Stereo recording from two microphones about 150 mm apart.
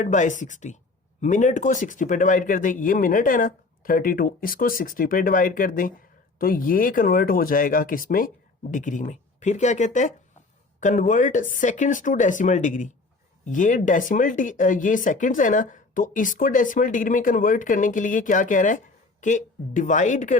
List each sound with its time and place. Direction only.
0.0 s speech: 55° left (ahead or behind)
8.7 s speech: 55° left (ahead or behind)